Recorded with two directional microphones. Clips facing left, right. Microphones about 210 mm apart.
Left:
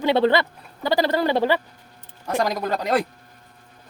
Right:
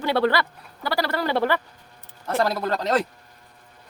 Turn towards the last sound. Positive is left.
turn(degrees=10)  # may be behind; listen again after turning